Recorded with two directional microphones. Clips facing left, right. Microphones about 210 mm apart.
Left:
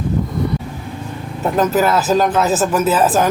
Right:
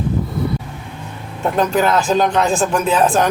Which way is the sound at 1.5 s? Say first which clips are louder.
Left 1 dB; 5° left (ahead or behind).